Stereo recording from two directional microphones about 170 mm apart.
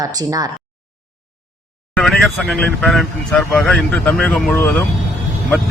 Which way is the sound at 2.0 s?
5° left (ahead or behind).